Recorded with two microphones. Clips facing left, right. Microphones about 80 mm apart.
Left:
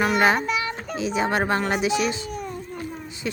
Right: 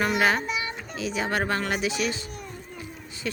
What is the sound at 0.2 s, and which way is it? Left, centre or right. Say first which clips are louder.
Speech: left 4 dB; left.